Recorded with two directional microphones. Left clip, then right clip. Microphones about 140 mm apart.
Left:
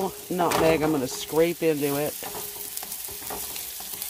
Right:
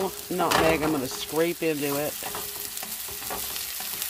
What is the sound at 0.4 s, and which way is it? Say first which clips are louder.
Speech: left 1 dB; 40° left (ahead or behind).